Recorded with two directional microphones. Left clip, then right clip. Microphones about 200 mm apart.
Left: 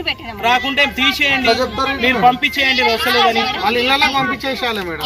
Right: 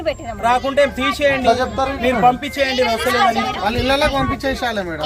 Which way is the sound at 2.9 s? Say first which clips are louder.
Left 2 dB; 25° right (ahead or behind).